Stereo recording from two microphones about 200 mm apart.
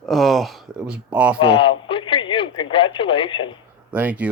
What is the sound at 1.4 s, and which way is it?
Radio, 25° left (ahead or behind).